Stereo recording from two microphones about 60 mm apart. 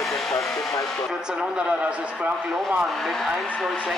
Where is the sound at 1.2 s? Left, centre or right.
Centre.